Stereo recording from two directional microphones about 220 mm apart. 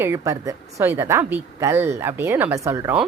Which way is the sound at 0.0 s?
15° right (ahead or behind).